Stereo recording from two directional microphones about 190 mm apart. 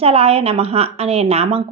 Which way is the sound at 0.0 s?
30° right (ahead or behind).